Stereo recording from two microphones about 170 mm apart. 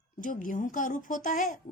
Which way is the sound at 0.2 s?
50° left (ahead or behind).